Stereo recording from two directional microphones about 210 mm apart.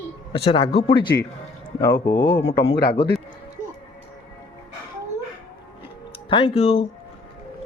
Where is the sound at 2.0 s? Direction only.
50° left (ahead or behind).